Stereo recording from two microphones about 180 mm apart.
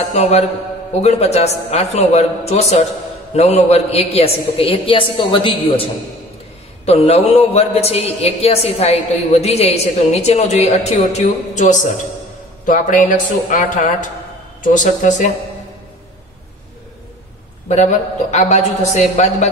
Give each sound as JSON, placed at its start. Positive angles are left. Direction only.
{"t": 0.1, "sound": "a woman's voice", "side_deg": 40}
{"t": 6.9, "sound": "a woman's voice", "side_deg": 35}
{"t": 17.6, "sound": "a woman's voice", "side_deg": 40}